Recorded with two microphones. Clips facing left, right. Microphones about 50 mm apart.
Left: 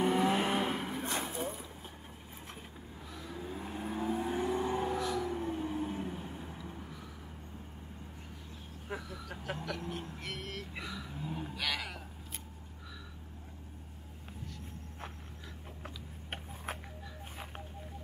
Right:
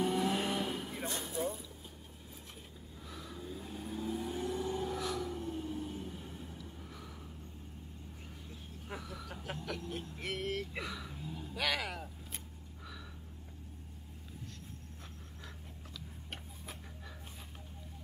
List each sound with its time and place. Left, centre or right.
0.0 s vehicle: left
3.3 s vehicle: left
4.9 s a sound: centre
5.3 s vehicle: left
8.8 s vehicle: centre
11.1 s vehicle: left
11.5 s vehicle: centre